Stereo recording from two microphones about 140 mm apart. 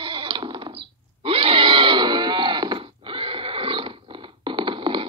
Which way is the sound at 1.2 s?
40° right (ahead or behind).